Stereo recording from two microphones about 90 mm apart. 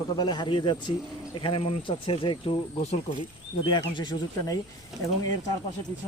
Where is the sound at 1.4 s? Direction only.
85° left; by 2.6 s 65° left (ahead or behind).